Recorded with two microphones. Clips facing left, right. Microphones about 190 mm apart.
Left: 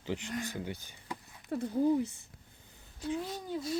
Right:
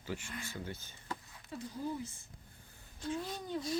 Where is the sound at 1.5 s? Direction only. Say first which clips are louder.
Left 11 dB; 60° left (ahead or behind).